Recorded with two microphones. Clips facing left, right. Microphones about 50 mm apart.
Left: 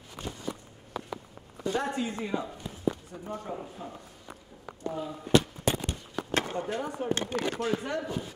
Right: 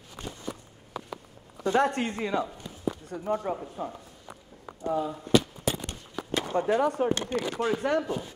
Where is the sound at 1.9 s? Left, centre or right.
Right.